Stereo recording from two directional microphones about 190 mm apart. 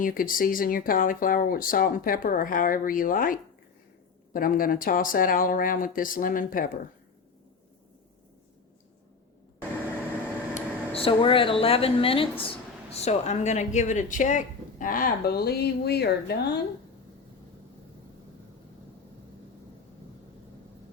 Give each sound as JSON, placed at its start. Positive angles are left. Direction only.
{"t": 0.0, "sound": "speech", "side_deg": 45}
{"t": 4.4, "sound": "speech", "side_deg": 50}
{"t": 10.5, "sound": "speech", "side_deg": 30}